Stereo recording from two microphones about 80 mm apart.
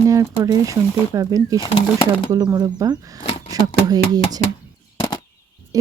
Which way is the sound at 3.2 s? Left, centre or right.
Left.